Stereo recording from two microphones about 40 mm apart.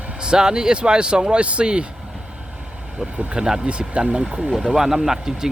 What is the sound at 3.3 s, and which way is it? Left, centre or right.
Speech, right.